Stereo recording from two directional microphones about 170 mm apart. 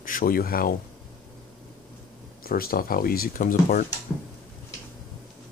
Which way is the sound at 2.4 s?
60° left (ahead or behind).